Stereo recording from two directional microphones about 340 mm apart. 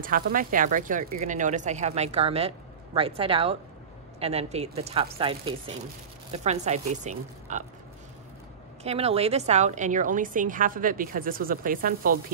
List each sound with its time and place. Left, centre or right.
0.0 s a woman's voice: right
8.8 s a woman's voice: centre